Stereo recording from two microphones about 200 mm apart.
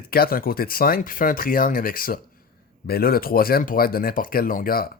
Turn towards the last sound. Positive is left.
turn(degrees=45)  # may be behind; listen again after turning